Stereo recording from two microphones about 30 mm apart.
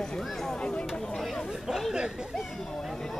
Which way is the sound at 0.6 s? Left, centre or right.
Left.